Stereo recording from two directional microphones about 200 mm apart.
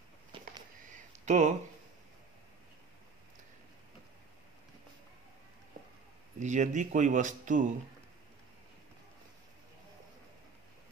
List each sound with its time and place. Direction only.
1.2 s speech: 35° right (ahead or behind)
6.4 s speech: 35° right (ahead or behind)